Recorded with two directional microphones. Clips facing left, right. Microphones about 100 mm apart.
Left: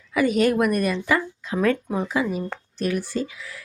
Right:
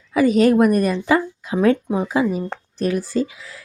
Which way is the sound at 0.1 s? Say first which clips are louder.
Right 5 dB; 35° right (ahead or behind).